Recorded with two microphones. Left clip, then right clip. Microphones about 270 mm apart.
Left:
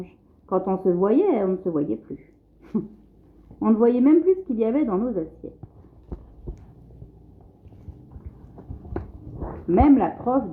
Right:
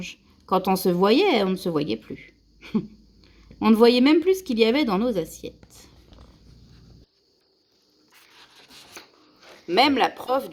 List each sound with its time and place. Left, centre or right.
0.4 s speech: right
3.6 s a woman's voice: right
9.7 s speech: right